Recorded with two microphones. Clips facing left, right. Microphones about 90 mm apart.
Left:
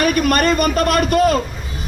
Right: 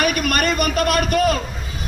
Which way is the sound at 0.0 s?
35° left (ahead or behind).